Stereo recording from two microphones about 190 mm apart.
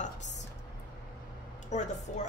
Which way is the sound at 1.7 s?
35° left (ahead or behind).